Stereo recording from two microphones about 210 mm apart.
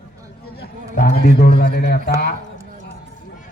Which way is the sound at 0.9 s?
40° left (ahead or behind).